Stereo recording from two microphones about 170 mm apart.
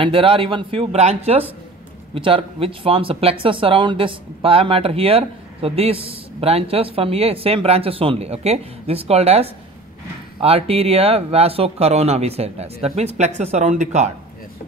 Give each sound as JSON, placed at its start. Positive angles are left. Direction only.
{"t": 0.0, "sound": "speech", "side_deg": -30}